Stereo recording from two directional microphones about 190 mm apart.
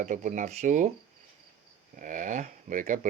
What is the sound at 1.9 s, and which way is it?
Speech, 45° right (ahead or behind).